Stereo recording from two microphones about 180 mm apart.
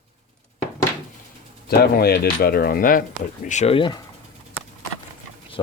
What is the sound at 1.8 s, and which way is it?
Speech, 60° left (ahead or behind).